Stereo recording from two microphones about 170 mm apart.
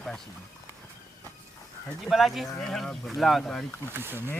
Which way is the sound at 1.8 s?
Centre (ahead or behind).